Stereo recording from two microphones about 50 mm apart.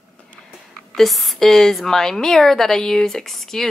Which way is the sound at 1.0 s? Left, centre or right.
Centre.